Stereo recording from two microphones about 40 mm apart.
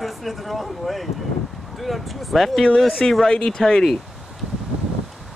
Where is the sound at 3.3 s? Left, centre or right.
Centre.